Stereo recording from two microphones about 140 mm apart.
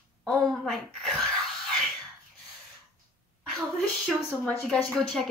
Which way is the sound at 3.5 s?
Centre (ahead or behind).